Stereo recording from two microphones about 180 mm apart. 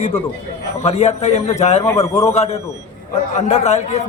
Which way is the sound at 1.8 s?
15° left (ahead or behind).